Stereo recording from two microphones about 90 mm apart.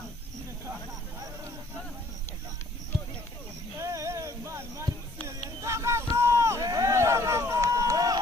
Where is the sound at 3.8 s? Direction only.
35° right (ahead or behind).